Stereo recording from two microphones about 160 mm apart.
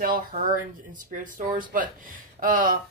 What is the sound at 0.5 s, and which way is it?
Speech, 55° right (ahead or behind).